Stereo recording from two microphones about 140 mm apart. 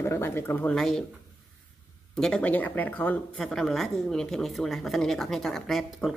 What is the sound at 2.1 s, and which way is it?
Speech, 5° left (ahead or behind).